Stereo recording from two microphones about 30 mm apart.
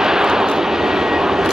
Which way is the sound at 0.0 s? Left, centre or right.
Centre.